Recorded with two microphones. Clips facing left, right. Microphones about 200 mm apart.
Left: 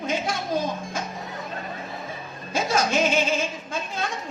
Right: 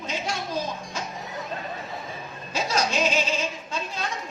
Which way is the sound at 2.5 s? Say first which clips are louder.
Left 3 dB; 50° left (ahead or behind).